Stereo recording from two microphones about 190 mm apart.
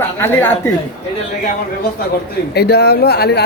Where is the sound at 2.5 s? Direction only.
60° left (ahead or behind).